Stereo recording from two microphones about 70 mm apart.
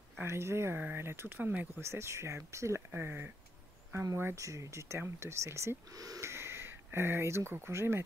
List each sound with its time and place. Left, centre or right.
0.2 s speech: right
1.8 s speech: right
2.9 s speech: right
3.9 s speech: right
5.9 s speech: right
6.2 s speech: right